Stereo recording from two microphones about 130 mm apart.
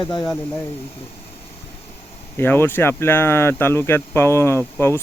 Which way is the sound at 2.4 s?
15° left (ahead or behind).